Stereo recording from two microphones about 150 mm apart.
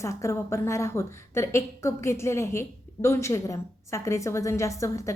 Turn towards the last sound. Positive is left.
turn(degrees=20)  # may be behind; listen again after turning